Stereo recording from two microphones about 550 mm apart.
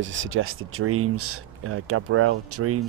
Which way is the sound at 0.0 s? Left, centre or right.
Right.